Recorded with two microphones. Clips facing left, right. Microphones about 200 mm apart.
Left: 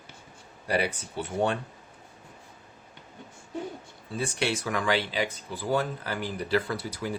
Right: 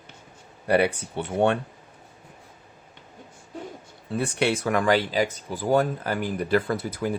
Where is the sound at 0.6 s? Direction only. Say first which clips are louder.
Right 7 dB; 60° right (ahead or behind).